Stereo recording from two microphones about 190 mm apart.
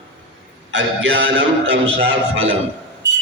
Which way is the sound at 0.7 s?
70° right (ahead or behind).